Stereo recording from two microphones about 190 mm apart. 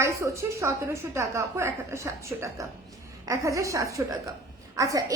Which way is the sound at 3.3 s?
15° right (ahead or behind).